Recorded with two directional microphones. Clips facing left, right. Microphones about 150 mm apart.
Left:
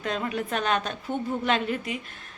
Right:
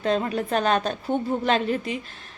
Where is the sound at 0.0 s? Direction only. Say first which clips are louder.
Right 5 dB; 35° right (ahead or behind).